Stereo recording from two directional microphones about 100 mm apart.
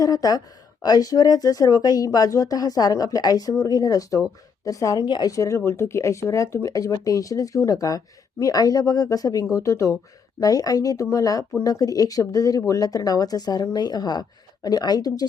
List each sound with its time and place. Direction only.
0.0 s speech: 35° left (ahead or behind)
5.3 s speech: 30° left (ahead or behind)